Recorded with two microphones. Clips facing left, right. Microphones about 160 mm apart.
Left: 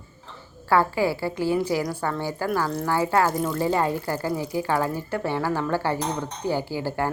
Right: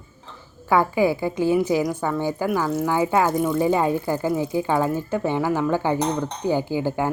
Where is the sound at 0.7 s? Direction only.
15° right (ahead or behind).